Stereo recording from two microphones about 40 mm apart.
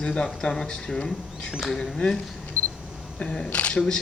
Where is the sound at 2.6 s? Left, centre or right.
Left.